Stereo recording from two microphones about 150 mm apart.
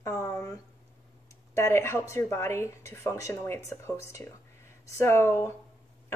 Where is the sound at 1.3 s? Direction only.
20° left (ahead or behind).